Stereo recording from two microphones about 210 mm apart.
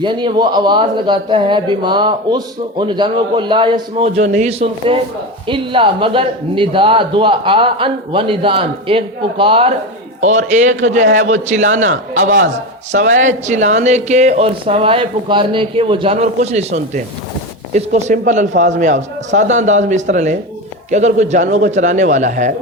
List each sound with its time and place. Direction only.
0.0 s a man's voice: 20° right (ahead or behind)